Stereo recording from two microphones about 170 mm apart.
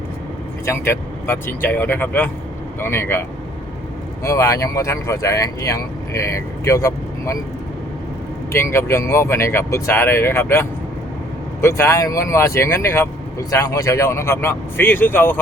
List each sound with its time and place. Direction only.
0.6 s speech: 15° left (ahead or behind)
8.5 s speech: 15° left (ahead or behind)